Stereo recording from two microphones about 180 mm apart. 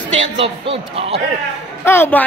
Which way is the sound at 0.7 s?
30° right (ahead or behind).